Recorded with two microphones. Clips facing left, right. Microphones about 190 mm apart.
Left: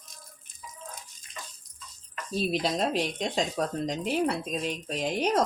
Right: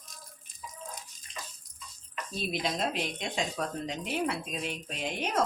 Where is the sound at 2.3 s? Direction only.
35° left (ahead or behind).